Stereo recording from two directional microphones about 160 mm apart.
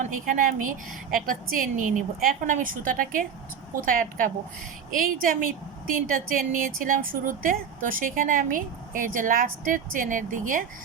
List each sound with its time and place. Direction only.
0.0 s a woman's voice: 55° right (ahead or behind)